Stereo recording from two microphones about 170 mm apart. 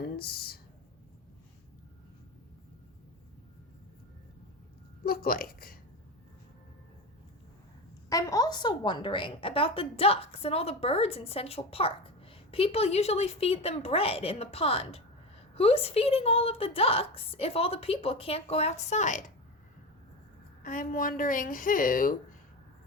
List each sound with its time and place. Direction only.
0.0 s a sound: 65° left (ahead or behind)
5.0 s speech: 60° left (ahead or behind)
8.1 s a woman's voice: 20° left (ahead or behind); by 19.2 s 45° left (ahead or behind)
20.6 s a woman's voice: 50° left (ahead or behind)